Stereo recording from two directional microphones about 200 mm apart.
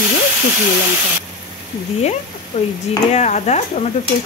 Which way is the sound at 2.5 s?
35° left (ahead or behind).